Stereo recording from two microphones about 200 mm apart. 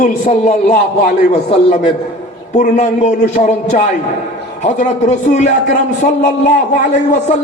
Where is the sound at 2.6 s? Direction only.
35° left (ahead or behind).